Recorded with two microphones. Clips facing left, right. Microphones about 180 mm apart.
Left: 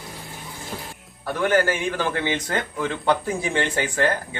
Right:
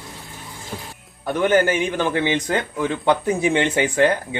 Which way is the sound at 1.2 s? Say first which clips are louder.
Right 3 dB; 20° right (ahead or behind).